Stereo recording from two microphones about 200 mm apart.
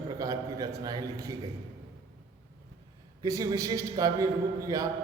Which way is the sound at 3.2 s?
15° right (ahead or behind).